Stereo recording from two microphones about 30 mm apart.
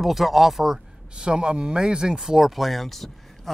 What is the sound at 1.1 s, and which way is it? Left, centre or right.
Speech, right.